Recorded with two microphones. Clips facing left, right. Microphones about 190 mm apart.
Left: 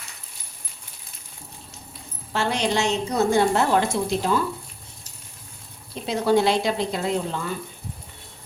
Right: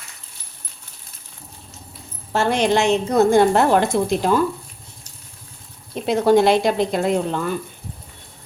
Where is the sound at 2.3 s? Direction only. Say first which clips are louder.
Right 6 dB; 50° right (ahead or behind).